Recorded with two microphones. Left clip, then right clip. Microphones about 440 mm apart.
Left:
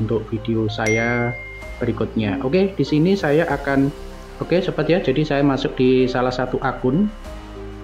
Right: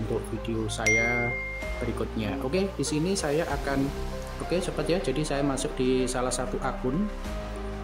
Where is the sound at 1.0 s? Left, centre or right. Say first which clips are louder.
Left 5 dB; right.